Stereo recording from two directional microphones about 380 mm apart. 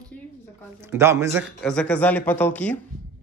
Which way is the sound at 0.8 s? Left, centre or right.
Centre.